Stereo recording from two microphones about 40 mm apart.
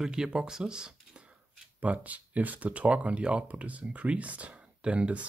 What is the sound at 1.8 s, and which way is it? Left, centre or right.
Speech, right.